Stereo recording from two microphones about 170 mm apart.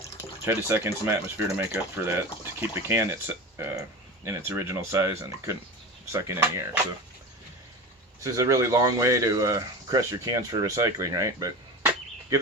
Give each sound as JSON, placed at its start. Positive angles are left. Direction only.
{"t": 0.4, "sound": "speech", "side_deg": -15}
{"t": 6.1, "sound": "speech", "side_deg": -15}
{"t": 8.2, "sound": "speech", "side_deg": -20}